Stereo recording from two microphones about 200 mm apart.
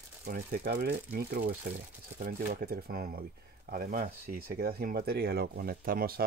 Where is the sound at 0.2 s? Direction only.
50° right (ahead or behind).